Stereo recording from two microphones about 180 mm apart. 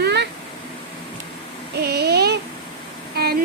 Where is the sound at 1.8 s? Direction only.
65° right (ahead or behind).